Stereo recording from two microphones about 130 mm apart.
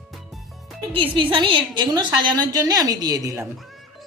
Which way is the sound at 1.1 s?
40° right (ahead or behind).